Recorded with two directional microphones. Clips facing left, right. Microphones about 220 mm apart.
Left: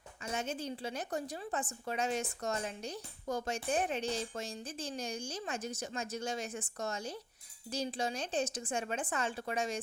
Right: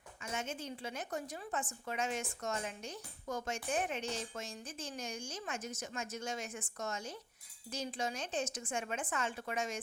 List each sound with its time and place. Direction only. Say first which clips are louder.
0.2 s a woman's voice: left 3 dB; 35° left (ahead or behind)